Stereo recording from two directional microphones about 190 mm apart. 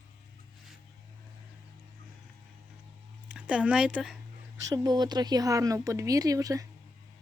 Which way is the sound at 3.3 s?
5° right (ahead or behind).